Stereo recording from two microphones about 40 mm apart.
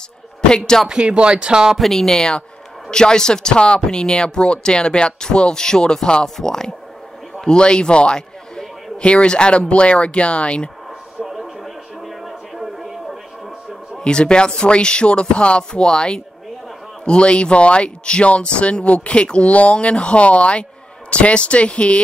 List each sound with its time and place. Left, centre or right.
0.5 s speech: centre
0.8 s speech: right
1.8 s a man's voice: centre; by 10.7 s left
11.6 s television: centre
14.0 s speech: left